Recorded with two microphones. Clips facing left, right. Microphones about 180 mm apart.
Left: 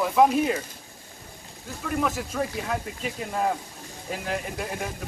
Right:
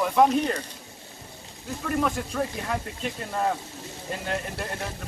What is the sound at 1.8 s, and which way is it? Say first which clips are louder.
Speech: right 1 dB; centre (ahead or behind).